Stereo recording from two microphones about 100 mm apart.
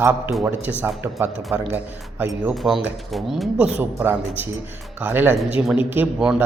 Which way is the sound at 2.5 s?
Centre (ahead or behind).